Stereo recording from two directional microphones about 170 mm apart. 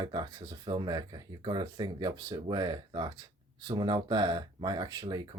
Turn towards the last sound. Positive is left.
turn(degrees=-25)  # may be behind; listen again after turning